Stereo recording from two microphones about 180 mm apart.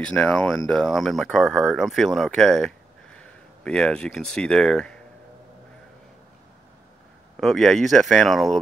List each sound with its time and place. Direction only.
0.0 s speech: 5° left (ahead or behind)
7.3 s speech: centre (ahead or behind)